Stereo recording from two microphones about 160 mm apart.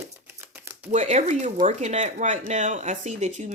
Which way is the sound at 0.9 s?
45° right (ahead or behind).